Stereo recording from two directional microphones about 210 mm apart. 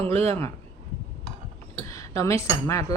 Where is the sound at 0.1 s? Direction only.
10° left (ahead or behind).